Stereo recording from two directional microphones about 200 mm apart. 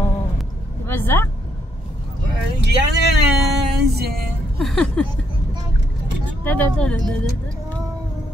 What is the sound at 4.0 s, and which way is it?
Speech, 50° right (ahead or behind).